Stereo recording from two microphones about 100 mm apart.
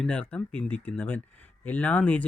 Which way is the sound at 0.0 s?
10° left (ahead or behind).